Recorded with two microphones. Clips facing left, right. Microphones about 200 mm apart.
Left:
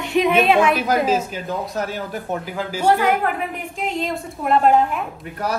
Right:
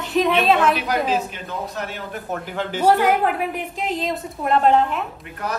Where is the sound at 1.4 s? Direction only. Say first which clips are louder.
Left 4 dB; 40° left (ahead or behind).